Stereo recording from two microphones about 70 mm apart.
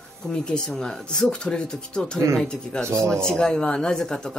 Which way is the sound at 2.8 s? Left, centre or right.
Right.